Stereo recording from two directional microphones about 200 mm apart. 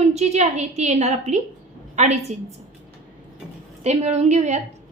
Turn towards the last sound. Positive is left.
turn(degrees=-35)  # may be behind; listen again after turning